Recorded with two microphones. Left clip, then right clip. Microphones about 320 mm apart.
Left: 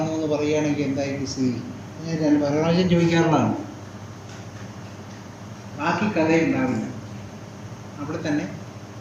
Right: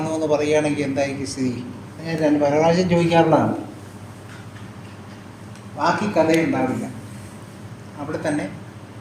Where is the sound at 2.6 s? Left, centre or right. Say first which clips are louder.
Right 4 dB; centre.